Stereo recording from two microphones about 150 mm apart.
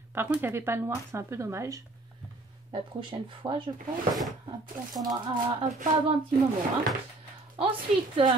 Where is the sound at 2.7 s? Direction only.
30° right (ahead or behind).